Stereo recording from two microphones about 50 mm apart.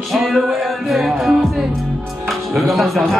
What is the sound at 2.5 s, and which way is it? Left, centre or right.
Music, centre.